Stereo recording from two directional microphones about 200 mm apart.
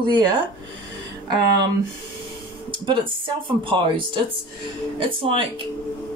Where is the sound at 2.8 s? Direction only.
25° right (ahead or behind).